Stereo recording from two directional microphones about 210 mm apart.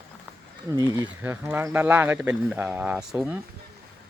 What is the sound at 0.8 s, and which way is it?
Speech, 20° right (ahead or behind).